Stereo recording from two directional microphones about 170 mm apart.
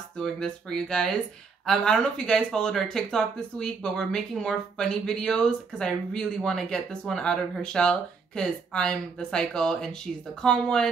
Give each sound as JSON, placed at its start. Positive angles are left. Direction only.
{"t": 0.2, "sound": "speech", "side_deg": 5}